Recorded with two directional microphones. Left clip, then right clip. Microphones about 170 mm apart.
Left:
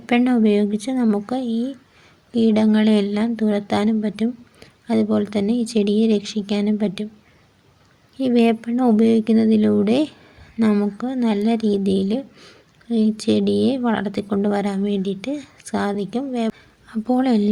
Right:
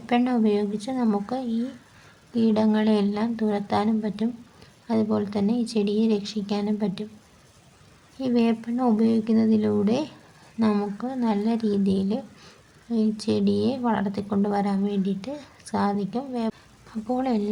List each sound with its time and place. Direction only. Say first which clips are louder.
0.0 s a woman's voice: left 5 dB; 20° left (ahead or behind)
8.2 s speech: left 6 dB; 20° left (ahead or behind)